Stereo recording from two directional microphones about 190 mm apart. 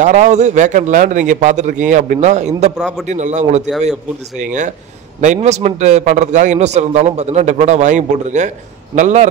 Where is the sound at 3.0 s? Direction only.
40° right (ahead or behind).